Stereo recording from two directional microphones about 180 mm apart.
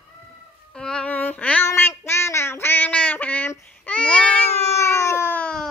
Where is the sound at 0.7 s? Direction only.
5° left (ahead or behind).